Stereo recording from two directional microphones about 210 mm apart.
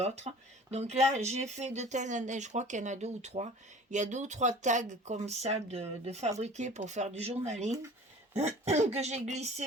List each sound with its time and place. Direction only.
0.3 s speech: 30° right (ahead or behind)